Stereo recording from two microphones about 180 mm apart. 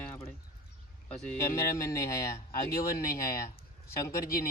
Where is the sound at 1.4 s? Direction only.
15° left (ahead or behind).